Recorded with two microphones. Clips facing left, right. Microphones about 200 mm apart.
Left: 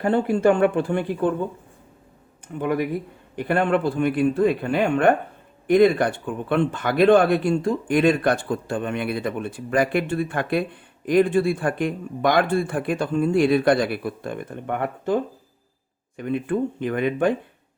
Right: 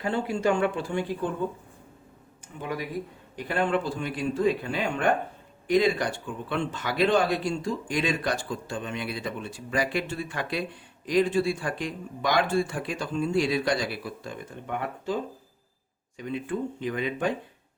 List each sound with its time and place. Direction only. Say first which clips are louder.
0.0 s speech: left 7 dB; 55° left (ahead or behind)
2.6 s speech: left 9 dB; 55° left (ahead or behind)